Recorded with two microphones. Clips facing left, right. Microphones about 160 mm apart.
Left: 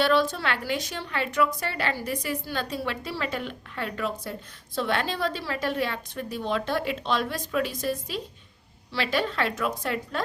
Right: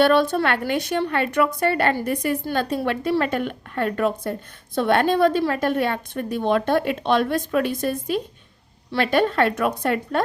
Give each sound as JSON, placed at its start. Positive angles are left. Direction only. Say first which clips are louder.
{"t": 0.0, "sound": "a woman's voice", "louder": "right 6 dB", "side_deg": -55}